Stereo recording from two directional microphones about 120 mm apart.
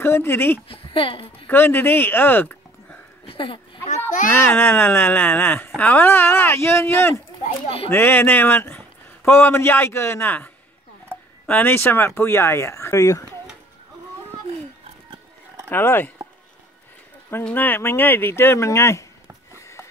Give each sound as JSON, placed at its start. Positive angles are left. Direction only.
{"t": 0.0, "sound": "speech", "side_deg": 20}
{"t": 0.7, "sound": "a woman's voice", "side_deg": 45}
{"t": 1.5, "sound": "speech", "side_deg": 15}
{"t": 3.3, "sound": "speech", "side_deg": 45}
{"t": 4.3, "sound": "speech", "side_deg": 20}
{"t": 7.6, "sound": "speech", "side_deg": 55}
{"t": 7.9, "sound": "speech", "side_deg": 20}
{"t": 15.7, "sound": "speech", "side_deg": 20}
{"t": 17.3, "sound": "speech", "side_deg": 15}